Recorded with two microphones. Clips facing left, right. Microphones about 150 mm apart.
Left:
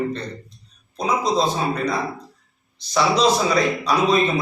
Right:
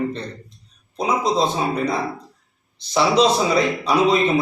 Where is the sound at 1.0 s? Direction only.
25° right (ahead or behind).